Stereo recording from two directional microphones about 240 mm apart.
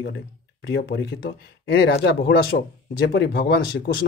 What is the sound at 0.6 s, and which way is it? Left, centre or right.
Speech, left.